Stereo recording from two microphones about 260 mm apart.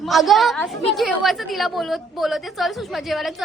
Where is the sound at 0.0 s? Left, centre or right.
Centre.